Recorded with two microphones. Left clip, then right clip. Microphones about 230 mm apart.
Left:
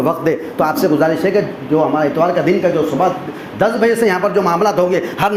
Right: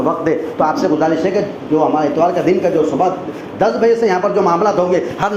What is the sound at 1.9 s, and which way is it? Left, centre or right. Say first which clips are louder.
Speech: even; left.